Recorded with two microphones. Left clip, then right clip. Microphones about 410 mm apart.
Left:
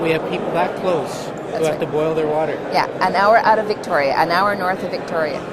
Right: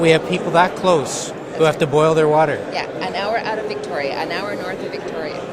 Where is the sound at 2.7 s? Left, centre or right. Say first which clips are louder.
Left 6 dB; left.